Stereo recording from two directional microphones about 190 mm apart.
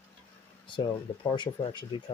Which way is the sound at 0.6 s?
25° left (ahead or behind).